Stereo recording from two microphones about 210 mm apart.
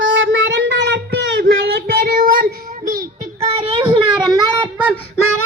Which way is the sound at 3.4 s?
25° right (ahead or behind).